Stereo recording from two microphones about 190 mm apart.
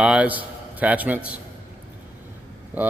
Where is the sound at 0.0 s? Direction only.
5° right (ahead or behind).